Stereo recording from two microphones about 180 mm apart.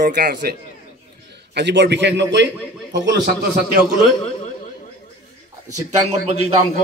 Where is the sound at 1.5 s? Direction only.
70° right (ahead or behind).